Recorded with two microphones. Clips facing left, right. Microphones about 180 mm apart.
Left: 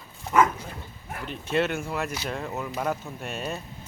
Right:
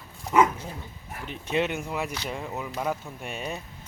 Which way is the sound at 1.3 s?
15° right (ahead or behind).